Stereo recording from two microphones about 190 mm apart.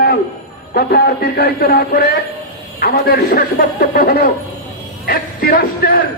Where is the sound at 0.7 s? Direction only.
55° left (ahead or behind).